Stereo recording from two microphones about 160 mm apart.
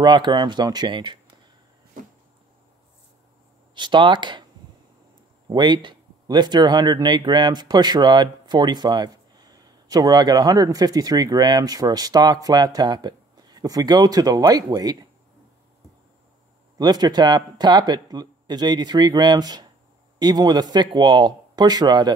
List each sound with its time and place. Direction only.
0.0 s speech: 30° right (ahead or behind)
3.7 s speech: 30° right (ahead or behind)
5.5 s speech: 30° right (ahead or behind)
16.7 s speech: 25° right (ahead or behind)